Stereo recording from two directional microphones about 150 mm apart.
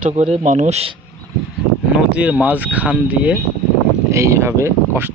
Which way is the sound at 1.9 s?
10° right (ahead or behind).